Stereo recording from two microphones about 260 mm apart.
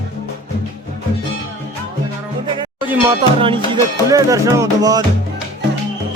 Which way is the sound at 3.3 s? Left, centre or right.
Right.